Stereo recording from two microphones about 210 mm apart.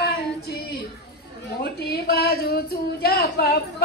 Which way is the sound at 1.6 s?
50° left (ahead or behind).